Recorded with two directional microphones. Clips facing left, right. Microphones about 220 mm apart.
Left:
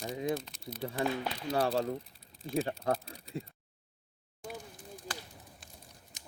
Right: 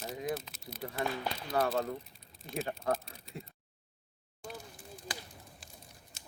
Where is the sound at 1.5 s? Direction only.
35° left (ahead or behind).